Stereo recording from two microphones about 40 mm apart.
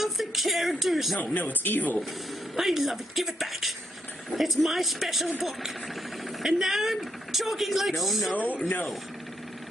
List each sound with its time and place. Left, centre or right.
0.0 s speech: centre
1.3 s speech: left
2.5 s speech: centre